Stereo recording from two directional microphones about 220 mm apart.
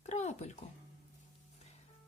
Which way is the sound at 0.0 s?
30° left (ahead or behind).